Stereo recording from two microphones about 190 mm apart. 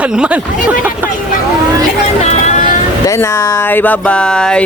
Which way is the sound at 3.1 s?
15° left (ahead or behind).